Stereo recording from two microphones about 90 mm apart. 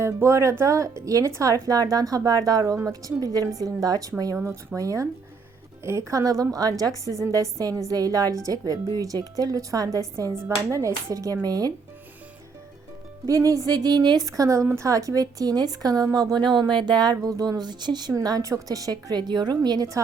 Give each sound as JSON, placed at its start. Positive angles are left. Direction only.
{"t": 0.0, "sound": "a woman's voice", "side_deg": -30}
{"t": 13.2, "sound": "a woman's voice", "side_deg": -40}
{"t": 16.4, "sound": "a woman's voice", "side_deg": -55}